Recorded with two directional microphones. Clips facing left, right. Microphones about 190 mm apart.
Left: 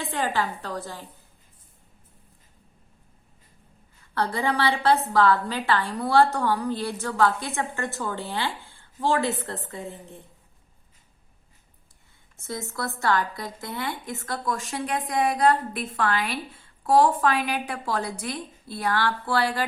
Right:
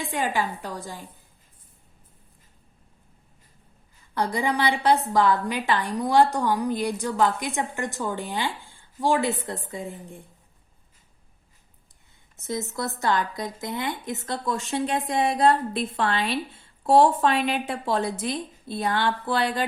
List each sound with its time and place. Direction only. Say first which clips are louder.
0.0 s a woman's voice: even; 15° right (ahead or behind)
4.1 s a woman's voice: even; 15° right (ahead or behind)
12.4 s speech: right 3 dB; 20° right (ahead or behind)